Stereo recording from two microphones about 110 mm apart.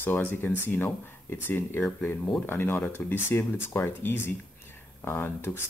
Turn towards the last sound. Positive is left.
turn(degrees=20)  # may be behind; listen again after turning